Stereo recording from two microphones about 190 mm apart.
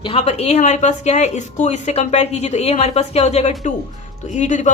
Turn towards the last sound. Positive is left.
turn(degrees=40)  # may be behind; listen again after turning